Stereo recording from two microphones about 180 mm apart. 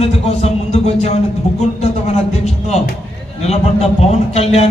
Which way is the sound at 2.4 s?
35° left (ahead or behind).